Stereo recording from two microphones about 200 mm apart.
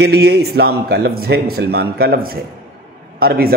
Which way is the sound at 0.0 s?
55° right (ahead or behind).